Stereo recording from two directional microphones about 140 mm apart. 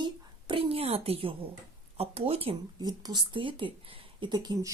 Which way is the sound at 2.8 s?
30° right (ahead or behind).